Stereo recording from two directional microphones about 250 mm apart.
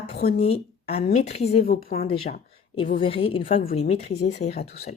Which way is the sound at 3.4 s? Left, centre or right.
Left.